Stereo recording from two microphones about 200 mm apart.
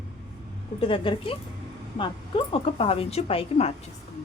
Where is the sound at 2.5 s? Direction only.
30° left (ahead or behind).